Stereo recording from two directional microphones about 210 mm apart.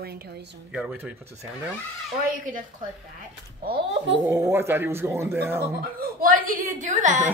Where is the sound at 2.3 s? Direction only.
40° right (ahead or behind).